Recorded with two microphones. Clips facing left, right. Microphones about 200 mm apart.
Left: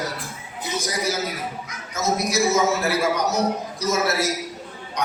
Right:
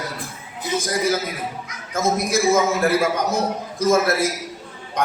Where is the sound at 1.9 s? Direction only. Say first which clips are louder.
Right 3 dB; 50° right (ahead or behind).